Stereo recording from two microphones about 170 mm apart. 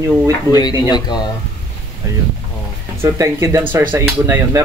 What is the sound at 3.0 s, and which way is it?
Speech, 15° right (ahead or behind).